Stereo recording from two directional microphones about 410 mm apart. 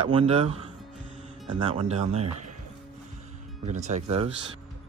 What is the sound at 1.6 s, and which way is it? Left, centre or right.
Speech, centre.